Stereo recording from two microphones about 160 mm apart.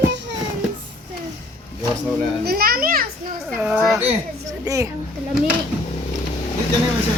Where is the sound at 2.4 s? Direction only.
70° right (ahead or behind).